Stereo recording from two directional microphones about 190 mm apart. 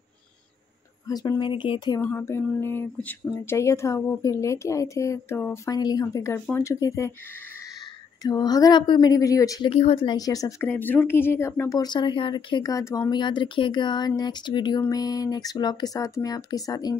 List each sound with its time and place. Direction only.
1.0 s speech: 15° left (ahead or behind)
2.0 s speech: 15° left (ahead or behind)
8.2 s speech: 20° left (ahead or behind)
9.7 s speech: 30° left (ahead or behind)